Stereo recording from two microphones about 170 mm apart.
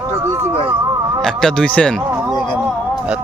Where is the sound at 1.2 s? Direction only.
5° left (ahead or behind).